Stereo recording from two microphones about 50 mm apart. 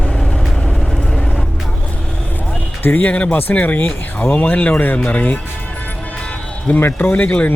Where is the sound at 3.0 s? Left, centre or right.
Left.